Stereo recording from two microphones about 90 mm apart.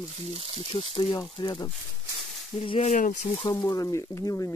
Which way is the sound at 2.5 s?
90° left.